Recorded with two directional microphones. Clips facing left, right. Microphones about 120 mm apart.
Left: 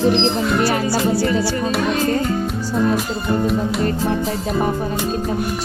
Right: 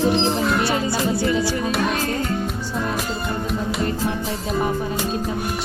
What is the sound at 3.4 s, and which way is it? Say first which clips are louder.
Speech: left 5 dB; centre (ahead or behind).